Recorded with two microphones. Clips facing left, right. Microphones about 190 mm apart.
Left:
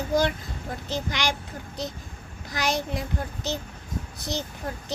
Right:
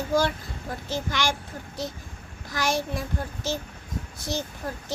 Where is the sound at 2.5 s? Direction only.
20° left (ahead or behind).